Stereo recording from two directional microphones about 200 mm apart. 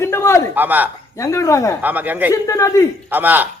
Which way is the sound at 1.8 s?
10° right (ahead or behind).